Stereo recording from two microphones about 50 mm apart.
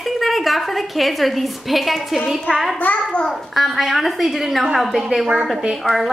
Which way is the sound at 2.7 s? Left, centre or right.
Left.